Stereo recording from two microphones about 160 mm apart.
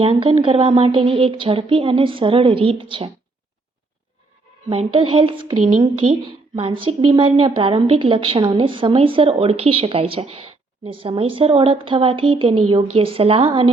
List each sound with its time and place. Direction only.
0.0 s a woman's voice: 35° right (ahead or behind)
4.7 s a woman's voice: 35° right (ahead or behind)
6.6 s a woman's voice: 35° right (ahead or behind)